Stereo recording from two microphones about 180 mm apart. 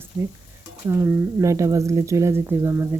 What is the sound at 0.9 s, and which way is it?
Speech, 15° right (ahead or behind).